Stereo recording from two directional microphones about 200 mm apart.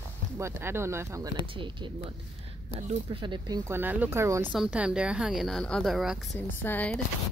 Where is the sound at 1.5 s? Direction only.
25° right (ahead or behind); by 7.0 s 5° left (ahead or behind).